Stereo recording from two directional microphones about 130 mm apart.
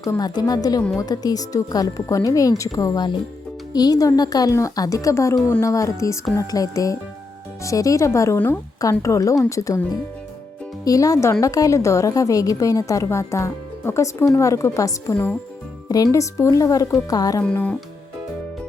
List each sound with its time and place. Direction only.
0.0 s a woman's voice: 30° left (ahead or behind)
15.1 s music: 15° left (ahead or behind)
16.1 s a woman's voice: 25° left (ahead or behind)
17.4 s music: 10° left (ahead or behind)